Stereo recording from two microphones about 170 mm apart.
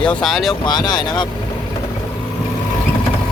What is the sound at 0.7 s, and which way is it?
Speech, 25° left (ahead or behind).